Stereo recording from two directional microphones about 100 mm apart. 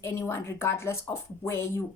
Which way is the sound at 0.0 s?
25° left (ahead or behind).